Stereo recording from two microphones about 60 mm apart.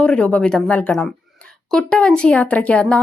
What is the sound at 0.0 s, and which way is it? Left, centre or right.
Speech, centre.